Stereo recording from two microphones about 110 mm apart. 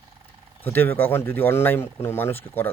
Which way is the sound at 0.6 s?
20° left (ahead or behind).